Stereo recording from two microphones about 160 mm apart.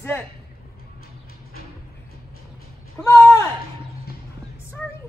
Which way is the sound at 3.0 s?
15° left (ahead or behind).